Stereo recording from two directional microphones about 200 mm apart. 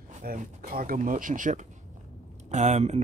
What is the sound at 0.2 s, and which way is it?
Speech, 45° right (ahead or behind).